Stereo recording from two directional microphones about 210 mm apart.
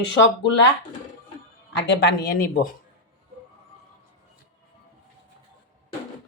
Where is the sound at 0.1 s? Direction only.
60° left (ahead or behind).